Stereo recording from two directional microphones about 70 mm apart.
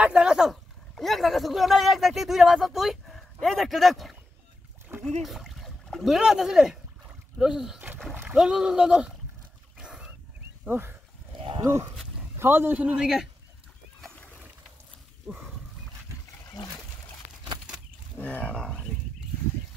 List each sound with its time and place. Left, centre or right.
0.0 s a sound: centre
3.2 s speech: centre
8.1 s splash: right
8.4 s speech: centre
9.8 s wild animals: centre
10.7 s a man's voice: right
12.4 s a man's voice: right
12.7 s speech: centre
14.1 s boat: left
18.1 s speech: left